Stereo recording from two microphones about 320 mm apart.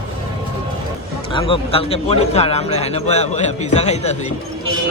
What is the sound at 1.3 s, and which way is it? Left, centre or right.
A man's voice, centre.